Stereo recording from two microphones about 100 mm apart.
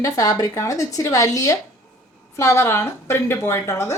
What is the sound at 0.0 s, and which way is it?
A woman's voice, 35° left (ahead or behind).